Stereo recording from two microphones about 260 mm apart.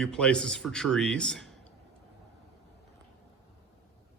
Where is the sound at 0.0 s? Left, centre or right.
Centre.